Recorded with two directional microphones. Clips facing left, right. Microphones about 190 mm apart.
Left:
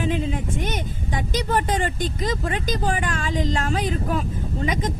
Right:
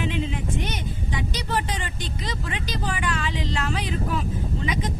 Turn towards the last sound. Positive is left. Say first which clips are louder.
# left 2 dB
turn(degrees=45)  # may be behind; listen again after turning